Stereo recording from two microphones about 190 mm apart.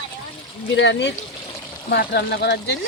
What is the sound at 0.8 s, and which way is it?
Speech, 65° left (ahead or behind).